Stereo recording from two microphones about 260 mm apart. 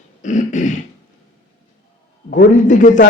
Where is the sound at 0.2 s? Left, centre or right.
Left.